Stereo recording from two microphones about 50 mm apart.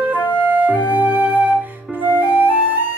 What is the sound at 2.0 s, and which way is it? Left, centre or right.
Music, right.